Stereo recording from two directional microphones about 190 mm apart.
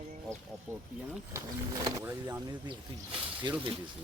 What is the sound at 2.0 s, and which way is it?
Speech, 15° right (ahead or behind).